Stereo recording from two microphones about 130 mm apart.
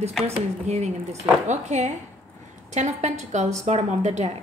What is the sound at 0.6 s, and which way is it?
A woman's voice, 60° right (ahead or behind).